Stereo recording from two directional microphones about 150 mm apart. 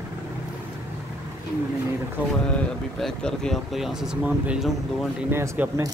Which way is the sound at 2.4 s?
5° left (ahead or behind).